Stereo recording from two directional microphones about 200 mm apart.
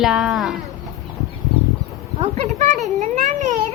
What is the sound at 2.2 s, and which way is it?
Speech, 30° right (ahead or behind).